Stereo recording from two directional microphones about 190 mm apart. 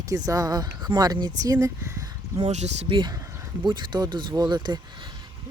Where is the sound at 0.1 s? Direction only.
20° right (ahead or behind).